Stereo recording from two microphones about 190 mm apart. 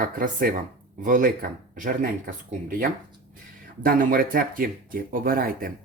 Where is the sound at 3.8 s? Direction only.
50° right (ahead or behind).